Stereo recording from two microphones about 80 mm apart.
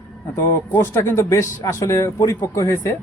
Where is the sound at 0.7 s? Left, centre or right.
Left.